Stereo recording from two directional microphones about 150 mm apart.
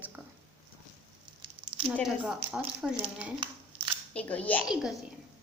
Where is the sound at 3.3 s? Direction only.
35° right (ahead or behind).